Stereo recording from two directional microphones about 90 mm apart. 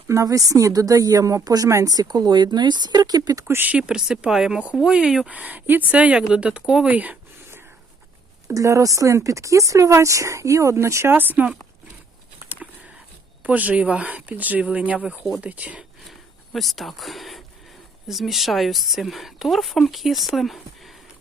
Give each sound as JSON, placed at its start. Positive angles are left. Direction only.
{"t": 0.1, "sound": "speech", "side_deg": -40}
{"t": 3.4, "sound": "speech", "side_deg": -25}
{"t": 3.7, "sound": "speech", "side_deg": -10}
{"t": 8.5, "sound": "speech", "side_deg": -40}
{"t": 12.6, "sound": "a sound", "side_deg": -10}
{"t": 13.4, "sound": "speech", "side_deg": -15}
{"t": 16.0, "sound": "speech", "side_deg": 0}